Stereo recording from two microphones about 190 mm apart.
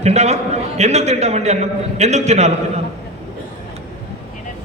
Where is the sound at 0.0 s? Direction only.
35° right (ahead or behind).